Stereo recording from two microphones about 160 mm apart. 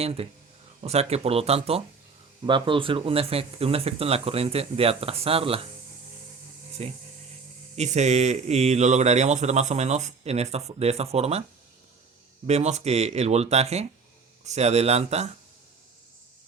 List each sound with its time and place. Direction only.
0.0 s speech: 40° right (ahead or behind)
6.8 s speech: 40° right (ahead or behind)
12.5 s speech: 45° right (ahead or behind)